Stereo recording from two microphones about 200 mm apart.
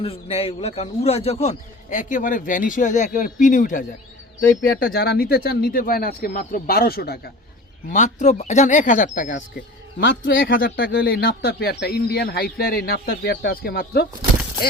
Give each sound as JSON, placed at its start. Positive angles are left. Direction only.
{"t": 0.0, "sound": "a man's voice", "side_deg": 30}
{"t": 7.9, "sound": "a man's voice", "side_deg": 40}